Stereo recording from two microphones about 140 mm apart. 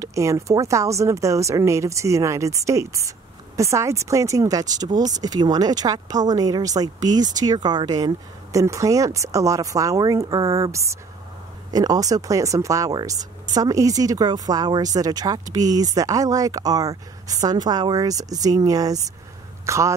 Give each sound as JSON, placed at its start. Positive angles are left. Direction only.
{"t": 0.0, "sound": "speech", "side_deg": -20}